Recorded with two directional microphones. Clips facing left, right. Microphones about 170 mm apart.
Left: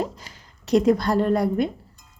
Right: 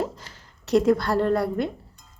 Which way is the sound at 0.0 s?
15° left (ahead or behind).